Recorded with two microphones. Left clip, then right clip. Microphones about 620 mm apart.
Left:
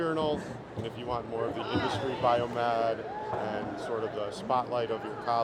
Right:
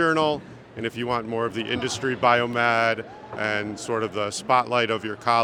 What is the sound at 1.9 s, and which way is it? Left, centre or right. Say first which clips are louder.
Speech: right 8 dB; right.